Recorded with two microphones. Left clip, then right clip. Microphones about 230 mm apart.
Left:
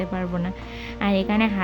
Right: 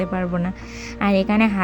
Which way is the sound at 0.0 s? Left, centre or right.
Right.